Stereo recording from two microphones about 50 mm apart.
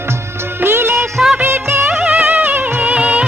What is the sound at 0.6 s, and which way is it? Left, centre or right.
Music of bollywood, right.